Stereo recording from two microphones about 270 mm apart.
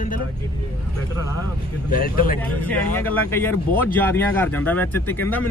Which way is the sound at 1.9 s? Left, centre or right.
Left.